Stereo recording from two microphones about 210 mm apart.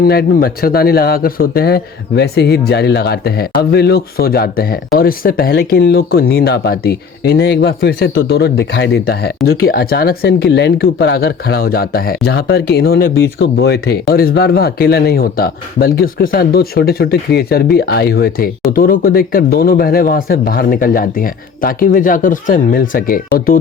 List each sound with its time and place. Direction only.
0.0 s speech: 45° left (ahead or behind)